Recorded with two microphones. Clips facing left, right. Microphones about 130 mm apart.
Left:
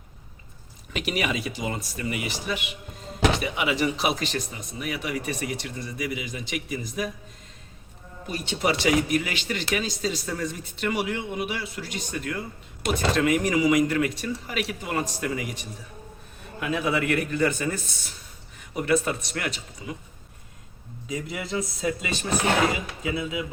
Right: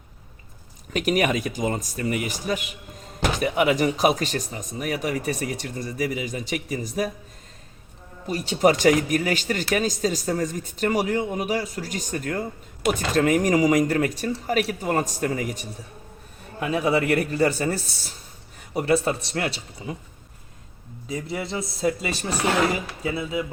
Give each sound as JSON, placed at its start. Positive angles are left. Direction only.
{"t": 0.9, "sound": "a man's voice", "side_deg": -45}
{"t": 8.3, "sound": "speech", "side_deg": -40}
{"t": 21.1, "sound": "speech", "side_deg": -30}